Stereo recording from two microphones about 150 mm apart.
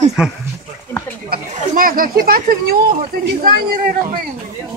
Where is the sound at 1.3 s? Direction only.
70° right (ahead or behind).